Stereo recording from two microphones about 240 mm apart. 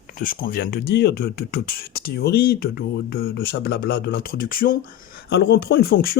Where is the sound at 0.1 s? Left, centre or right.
Left.